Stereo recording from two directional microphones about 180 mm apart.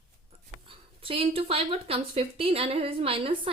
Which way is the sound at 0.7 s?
30° right (ahead or behind).